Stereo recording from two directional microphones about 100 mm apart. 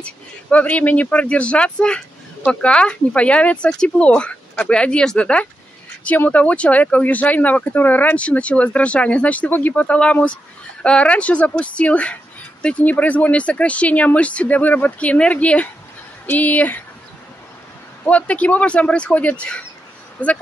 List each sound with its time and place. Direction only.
0.0 s speech: 15° left (ahead or behind)
18.0 s speech: 15° left (ahead or behind)